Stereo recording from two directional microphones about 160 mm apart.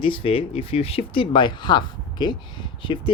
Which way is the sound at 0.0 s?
35° left (ahead or behind).